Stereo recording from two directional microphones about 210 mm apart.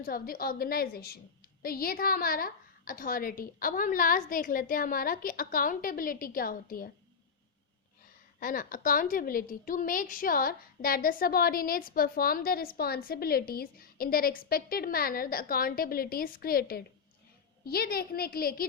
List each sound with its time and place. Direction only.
0.0 s a woman's voice: 45° left (ahead or behind)
8.4 s a woman's voice: 40° left (ahead or behind)